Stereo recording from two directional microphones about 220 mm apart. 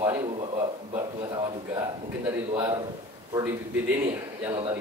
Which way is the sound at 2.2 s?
10° right (ahead or behind).